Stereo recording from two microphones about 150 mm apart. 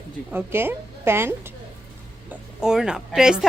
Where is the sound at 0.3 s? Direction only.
15° right (ahead or behind).